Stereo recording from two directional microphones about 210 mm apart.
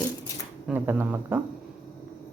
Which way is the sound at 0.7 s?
10° right (ahead or behind).